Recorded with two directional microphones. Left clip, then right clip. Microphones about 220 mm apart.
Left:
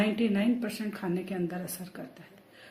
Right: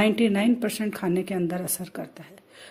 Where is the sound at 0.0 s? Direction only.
45° right (ahead or behind).